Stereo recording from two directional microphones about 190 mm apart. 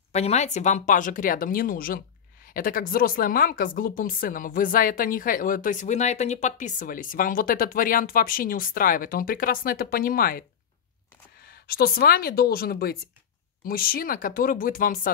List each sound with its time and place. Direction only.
0.1 s speech: 35° left (ahead or behind)
11.4 s speech: 50° left (ahead or behind)